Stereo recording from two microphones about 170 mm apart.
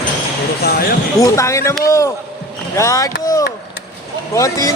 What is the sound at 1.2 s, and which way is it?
Speech, 15° left (ahead or behind).